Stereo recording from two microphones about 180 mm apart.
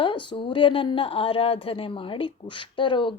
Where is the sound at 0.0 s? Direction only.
25° left (ahead or behind).